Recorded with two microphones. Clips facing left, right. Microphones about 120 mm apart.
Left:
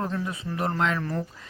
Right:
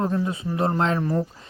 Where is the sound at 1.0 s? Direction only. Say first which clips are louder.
Right 6 dB; 20° right (ahead or behind).